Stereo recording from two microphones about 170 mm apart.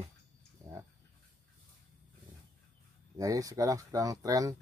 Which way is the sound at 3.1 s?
20° right (ahead or behind).